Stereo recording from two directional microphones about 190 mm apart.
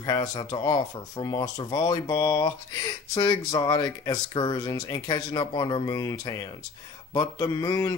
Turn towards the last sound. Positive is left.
turn(degrees=20)  # may be behind; listen again after turning